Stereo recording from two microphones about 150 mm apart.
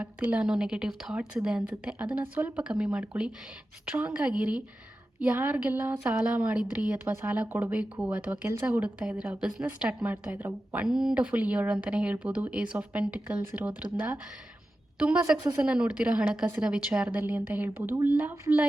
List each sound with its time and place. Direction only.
0.0 s a woman's voice: 10° right (ahead or behind)
5.8 s speech: 20° right (ahead or behind)
6.1 s a woman's voice: 10° right (ahead or behind)
14.9 s a woman's voice: 5° right (ahead or behind)